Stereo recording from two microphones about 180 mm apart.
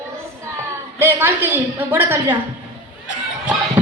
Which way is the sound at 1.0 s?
10° right (ahead or behind).